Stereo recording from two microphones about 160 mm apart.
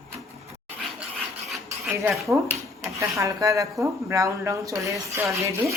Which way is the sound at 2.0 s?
20° right (ahead or behind).